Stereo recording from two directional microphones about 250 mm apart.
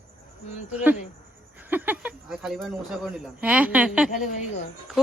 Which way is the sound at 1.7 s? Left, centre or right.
Centre.